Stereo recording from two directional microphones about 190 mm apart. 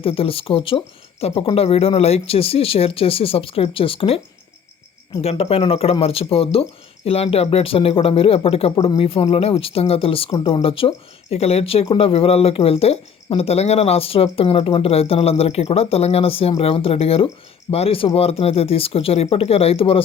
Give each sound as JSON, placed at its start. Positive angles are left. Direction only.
{"t": 0.0, "sound": "speech", "side_deg": 30}
{"t": 5.2, "sound": "speech", "side_deg": 30}